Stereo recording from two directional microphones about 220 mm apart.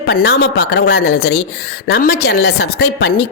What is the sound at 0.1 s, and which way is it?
A woman's voice, 45° left (ahead or behind).